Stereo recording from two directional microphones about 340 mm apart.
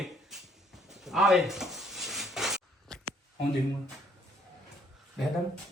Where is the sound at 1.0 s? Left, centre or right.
Centre.